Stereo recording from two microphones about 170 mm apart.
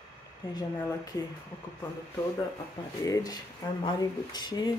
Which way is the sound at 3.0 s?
20° left (ahead or behind).